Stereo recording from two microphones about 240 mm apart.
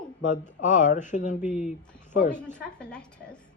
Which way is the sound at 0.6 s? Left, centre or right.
Left.